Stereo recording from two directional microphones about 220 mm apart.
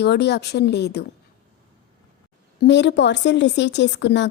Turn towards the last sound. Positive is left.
turn(degrees=50)  # may be behind; listen again after turning